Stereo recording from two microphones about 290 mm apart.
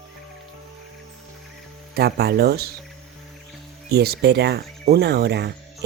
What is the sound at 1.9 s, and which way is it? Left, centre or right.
Speech, right.